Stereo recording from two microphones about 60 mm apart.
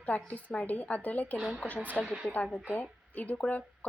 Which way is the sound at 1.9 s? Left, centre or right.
Left.